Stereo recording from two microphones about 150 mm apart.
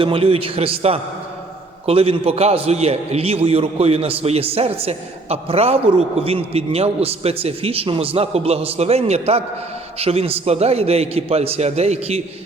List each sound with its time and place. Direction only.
0.0 s a man's voice: 40° right (ahead or behind)